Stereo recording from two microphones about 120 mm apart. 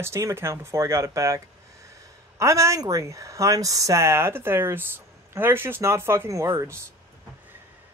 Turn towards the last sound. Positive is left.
turn(degrees=-25)  # may be behind; listen again after turning